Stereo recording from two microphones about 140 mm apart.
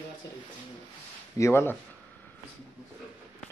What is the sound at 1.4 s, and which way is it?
Speech, 20° left (ahead or behind).